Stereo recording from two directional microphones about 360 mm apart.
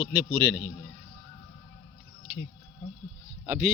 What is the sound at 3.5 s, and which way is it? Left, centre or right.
Speech, centre.